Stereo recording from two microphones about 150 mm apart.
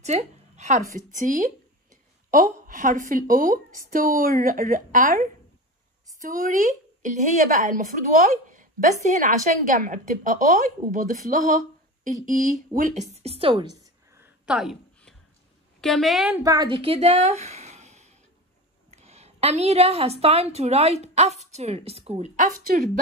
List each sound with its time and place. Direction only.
0.0 s a woman's voice: 50° right (ahead or behind)
14.4 s a sound: 5° right (ahead or behind)
15.8 s a woman's voice: centre (ahead or behind)
16.3 s a woman's voice: 25° right (ahead or behind); by 22.8 s 55° right (ahead or behind)